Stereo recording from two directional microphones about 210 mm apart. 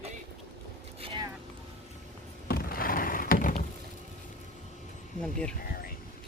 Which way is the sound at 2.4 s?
45° left (ahead or behind).